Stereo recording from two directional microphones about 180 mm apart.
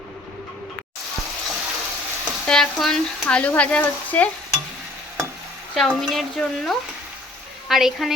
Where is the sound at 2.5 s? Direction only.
5° left (ahead or behind).